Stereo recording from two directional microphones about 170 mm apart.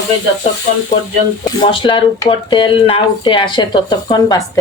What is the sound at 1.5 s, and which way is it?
Speech, 30° left (ahead or behind).